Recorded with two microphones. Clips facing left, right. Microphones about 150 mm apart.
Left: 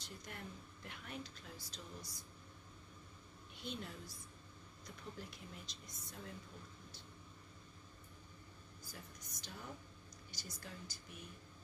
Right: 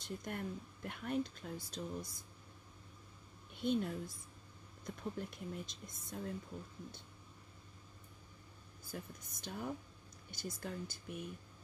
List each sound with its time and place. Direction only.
0.0 s a woman's voice: 50° right (ahead or behind)
3.5 s a woman's voice: 50° right (ahead or behind)
8.8 s speech: 55° right (ahead or behind)